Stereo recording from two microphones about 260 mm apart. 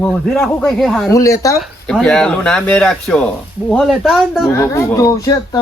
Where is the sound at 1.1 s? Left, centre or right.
Centre.